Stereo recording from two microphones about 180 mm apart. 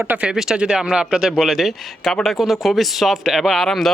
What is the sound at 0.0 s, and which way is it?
Speech, 10° right (ahead or behind).